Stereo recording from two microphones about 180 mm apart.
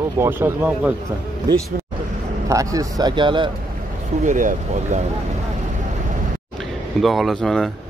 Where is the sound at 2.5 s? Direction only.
20° right (ahead or behind).